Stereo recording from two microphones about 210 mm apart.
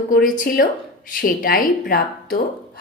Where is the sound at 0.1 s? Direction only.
40° left (ahead or behind).